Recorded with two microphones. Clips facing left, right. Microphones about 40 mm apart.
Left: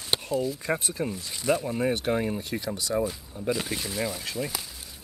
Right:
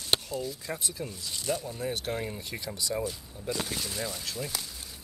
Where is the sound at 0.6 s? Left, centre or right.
Left; by 4.6 s centre.